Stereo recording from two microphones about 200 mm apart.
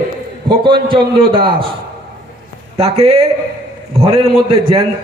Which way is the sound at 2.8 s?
30° right (ahead or behind).